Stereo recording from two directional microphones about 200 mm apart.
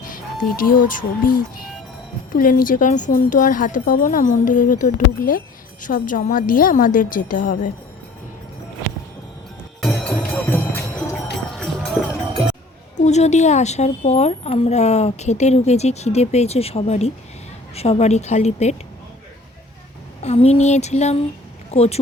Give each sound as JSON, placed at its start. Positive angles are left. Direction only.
{"t": 0.0, "sound": "a woman's voice", "side_deg": 45}
{"t": 9.8, "sound": "music", "side_deg": 5}
{"t": 11.5, "sound": "run", "side_deg": 5}
{"t": 13.0, "sound": "a woman's voice", "side_deg": 35}
{"t": 20.2, "sound": "a woman's voice", "side_deg": 30}